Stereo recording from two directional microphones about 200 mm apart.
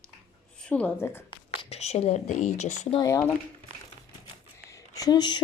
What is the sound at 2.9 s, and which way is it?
Speech, 15° left (ahead or behind).